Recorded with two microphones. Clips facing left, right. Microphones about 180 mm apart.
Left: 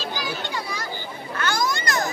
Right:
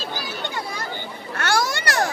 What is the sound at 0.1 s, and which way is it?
Children playing, 55° right (ahead or behind).